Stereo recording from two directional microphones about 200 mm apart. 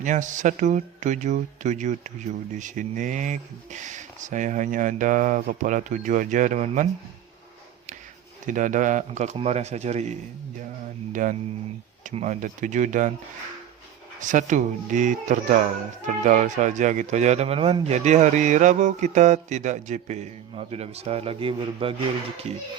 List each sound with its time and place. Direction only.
0.0 s speech: 40° right (ahead or behind)
8.4 s speech: 40° right (ahead or behind)
14.2 s speech: 40° right (ahead or behind)